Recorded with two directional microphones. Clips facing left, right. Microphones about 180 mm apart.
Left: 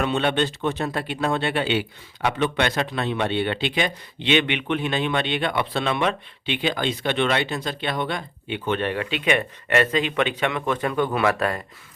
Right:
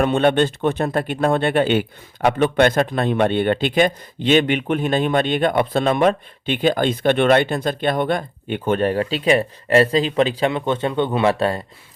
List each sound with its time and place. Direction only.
0.0 s speech: 50° right (ahead or behind); by 11.6 s 30° right (ahead or behind)